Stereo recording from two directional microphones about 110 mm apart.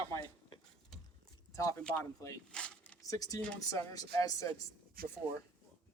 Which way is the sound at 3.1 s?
30° left (ahead or behind).